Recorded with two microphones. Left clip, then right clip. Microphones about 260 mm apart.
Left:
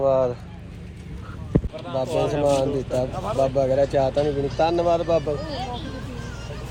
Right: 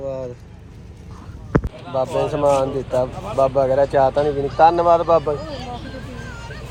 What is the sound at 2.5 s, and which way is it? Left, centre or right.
Speech, centre.